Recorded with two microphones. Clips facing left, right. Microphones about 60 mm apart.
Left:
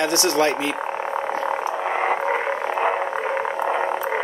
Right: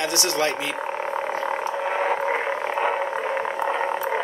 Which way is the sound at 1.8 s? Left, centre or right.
Left.